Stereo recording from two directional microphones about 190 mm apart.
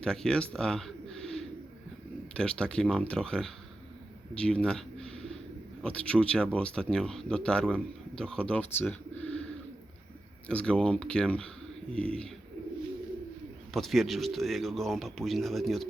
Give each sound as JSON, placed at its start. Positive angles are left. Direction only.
{"t": 0.0, "sound": "speech", "side_deg": 5}
{"t": 4.4, "sound": "a sound", "side_deg": 5}
{"t": 5.8, "sound": "speech", "side_deg": 5}
{"t": 10.5, "sound": "speech", "side_deg": 5}
{"t": 13.7, "sound": "speech", "side_deg": 0}